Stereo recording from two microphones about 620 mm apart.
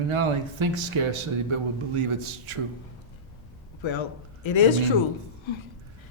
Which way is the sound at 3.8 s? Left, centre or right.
Left.